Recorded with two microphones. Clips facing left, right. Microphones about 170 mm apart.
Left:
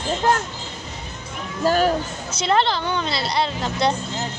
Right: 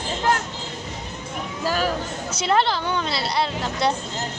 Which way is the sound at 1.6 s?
50° left (ahead or behind).